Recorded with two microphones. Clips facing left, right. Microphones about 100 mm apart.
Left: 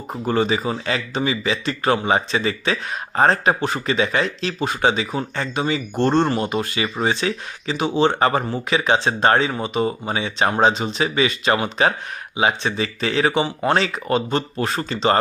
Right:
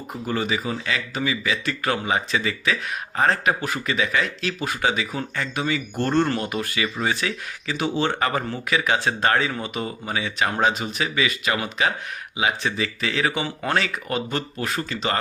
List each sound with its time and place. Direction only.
0.1 s speech: 35° left (ahead or behind)